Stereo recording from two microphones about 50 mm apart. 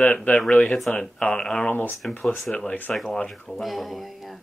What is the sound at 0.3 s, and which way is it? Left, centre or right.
Speech, left.